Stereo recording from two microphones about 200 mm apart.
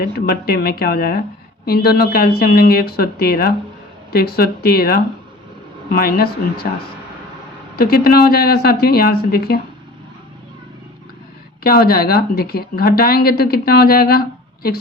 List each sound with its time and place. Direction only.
0.0 s speech: 50° left (ahead or behind)
7.8 s speech: 50° left (ahead or behind)
11.6 s speech: 50° left (ahead or behind)